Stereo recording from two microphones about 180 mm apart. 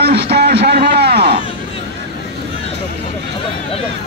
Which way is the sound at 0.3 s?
65° right (ahead or behind).